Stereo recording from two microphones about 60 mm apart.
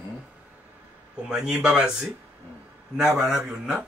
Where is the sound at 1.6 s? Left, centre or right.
Centre.